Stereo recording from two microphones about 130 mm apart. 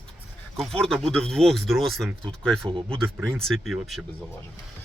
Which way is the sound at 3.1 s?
20° right (ahead or behind).